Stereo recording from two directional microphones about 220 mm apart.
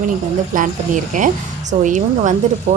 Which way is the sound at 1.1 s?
35° right (ahead or behind).